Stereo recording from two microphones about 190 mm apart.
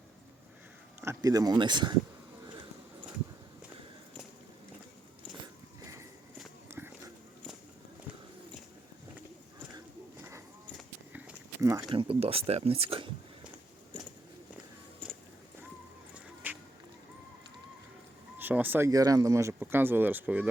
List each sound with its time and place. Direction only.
1.0 s speech: 20° right (ahead or behind)
5.8 s walk: 15° right (ahead or behind)
6.7 s a sound: 10° right (ahead or behind)
9.7 s a sound: 15° right (ahead or behind)
10.8 s run: 5° right (ahead or behind)
11.6 s speech: 15° right (ahead or behind)
16.1 s music: 10° right (ahead or behind)
18.3 s speech: 10° right (ahead or behind)